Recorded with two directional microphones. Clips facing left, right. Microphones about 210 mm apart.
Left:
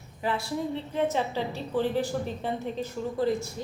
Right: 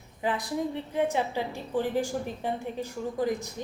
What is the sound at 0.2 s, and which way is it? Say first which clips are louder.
A woman's voice: even; 15° right (ahead or behind).